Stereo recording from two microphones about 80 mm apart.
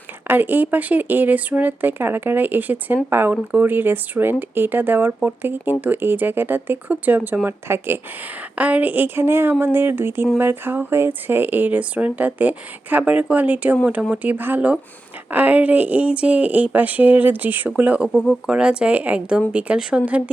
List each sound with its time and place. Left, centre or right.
0.3 s speech: right
18.1 s speech: centre
18.4 s speech: centre